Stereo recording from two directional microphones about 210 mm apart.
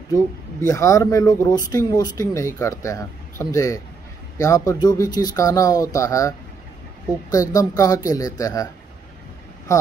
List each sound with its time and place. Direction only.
0.1 s speech: 15° left (ahead or behind)